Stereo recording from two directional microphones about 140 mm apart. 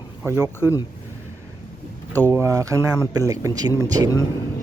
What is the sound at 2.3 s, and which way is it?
Speech, 20° right (ahead or behind).